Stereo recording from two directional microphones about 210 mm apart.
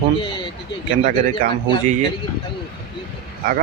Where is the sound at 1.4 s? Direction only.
40° right (ahead or behind).